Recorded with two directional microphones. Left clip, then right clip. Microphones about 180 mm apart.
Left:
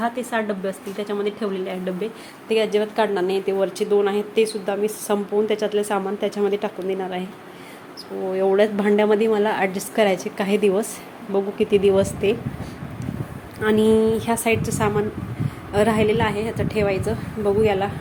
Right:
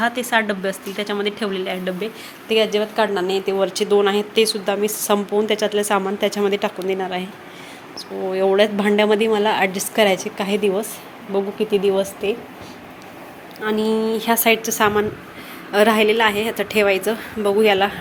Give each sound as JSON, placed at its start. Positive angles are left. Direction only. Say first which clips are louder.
{"t": 0.0, "sound": "speech", "louder": "right 5 dB", "side_deg": 0}
{"t": 8.3, "sound": "a woman's voice", "louder": "right 2 dB", "side_deg": 10}
{"t": 13.6, "sound": "a woman's voice", "louder": "left 3 dB", "side_deg": 25}